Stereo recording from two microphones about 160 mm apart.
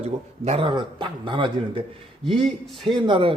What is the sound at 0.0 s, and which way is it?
Speech, 40° right (ahead or behind).